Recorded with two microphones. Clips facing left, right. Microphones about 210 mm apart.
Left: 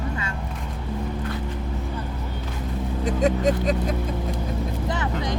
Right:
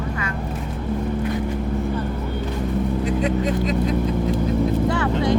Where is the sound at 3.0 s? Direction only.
45° left (ahead or behind).